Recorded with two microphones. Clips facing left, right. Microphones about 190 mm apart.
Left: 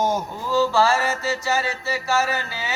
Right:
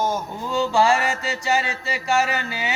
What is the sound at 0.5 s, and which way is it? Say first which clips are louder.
Mantra: even; 15° right (ahead or behind).